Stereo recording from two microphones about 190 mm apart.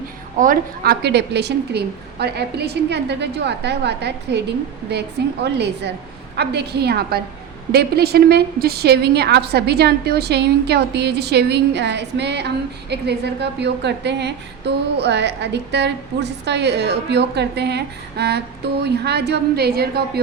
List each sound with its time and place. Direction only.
0.3 s a woman's voice: 45° right (ahead or behind)